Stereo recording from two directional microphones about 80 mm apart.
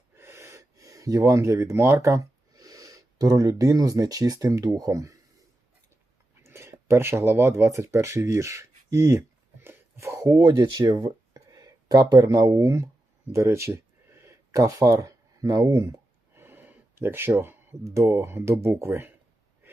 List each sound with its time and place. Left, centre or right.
0.2 s speech: right
6.4 s speech: right
10.7 s speech: right
13.3 s speech: right
16.3 s gasp: right
17.8 s speech: right